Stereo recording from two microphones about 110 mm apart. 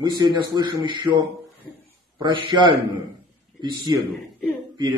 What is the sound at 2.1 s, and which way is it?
Speech, 45° right (ahead or behind).